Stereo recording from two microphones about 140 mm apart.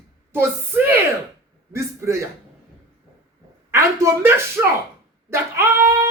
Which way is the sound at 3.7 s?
20° right (ahead or behind).